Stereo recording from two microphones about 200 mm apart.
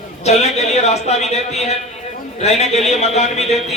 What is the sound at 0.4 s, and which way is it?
A man's voice, 35° left (ahead or behind).